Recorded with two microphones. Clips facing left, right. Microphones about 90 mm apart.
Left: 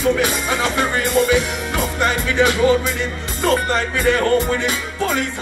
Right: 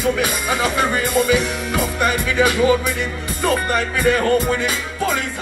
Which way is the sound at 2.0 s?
20° right (ahead or behind).